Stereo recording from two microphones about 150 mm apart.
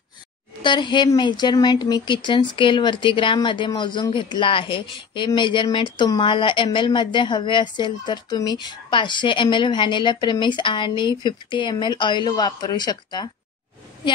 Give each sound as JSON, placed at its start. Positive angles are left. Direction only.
{"t": 0.6, "sound": "speech", "side_deg": 30}